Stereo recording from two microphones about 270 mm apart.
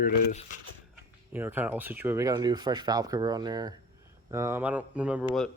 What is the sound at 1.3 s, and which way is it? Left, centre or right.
Speech, centre.